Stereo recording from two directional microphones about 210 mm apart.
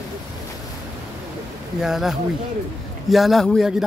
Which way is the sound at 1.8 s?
Centre (ahead or behind).